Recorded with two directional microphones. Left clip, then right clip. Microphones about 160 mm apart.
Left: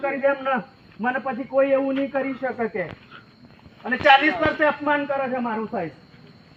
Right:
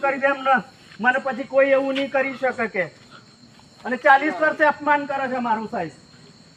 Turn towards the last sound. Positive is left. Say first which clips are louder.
# right 3 dB
turn(degrees=-10)  # may be behind; listen again after turning